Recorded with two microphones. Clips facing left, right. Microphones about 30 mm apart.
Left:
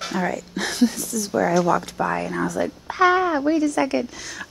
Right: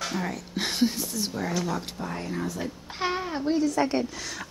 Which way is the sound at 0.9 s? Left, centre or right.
Right.